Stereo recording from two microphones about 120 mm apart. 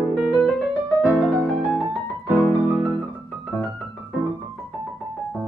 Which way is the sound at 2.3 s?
20° left (ahead or behind).